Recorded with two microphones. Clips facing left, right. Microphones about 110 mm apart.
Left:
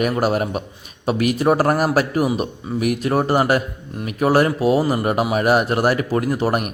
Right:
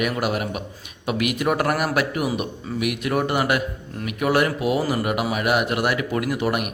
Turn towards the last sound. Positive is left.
turn(degrees=40)  # may be behind; listen again after turning